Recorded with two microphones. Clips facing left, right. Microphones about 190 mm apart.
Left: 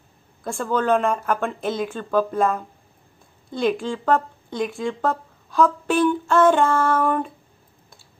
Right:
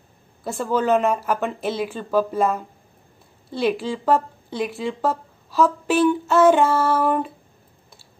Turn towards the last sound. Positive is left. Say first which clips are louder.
# right 1 dB
turn(degrees=-5)  # may be behind; listen again after turning